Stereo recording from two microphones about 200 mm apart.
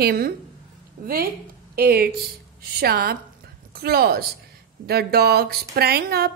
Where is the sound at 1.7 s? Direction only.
50° right (ahead or behind).